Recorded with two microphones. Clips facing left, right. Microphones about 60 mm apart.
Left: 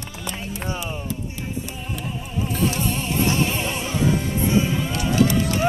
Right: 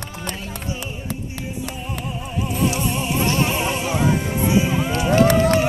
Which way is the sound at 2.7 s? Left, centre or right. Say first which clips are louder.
Right 2 dB; centre.